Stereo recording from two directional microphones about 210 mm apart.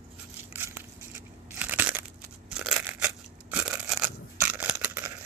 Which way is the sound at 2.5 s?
5° right (ahead or behind).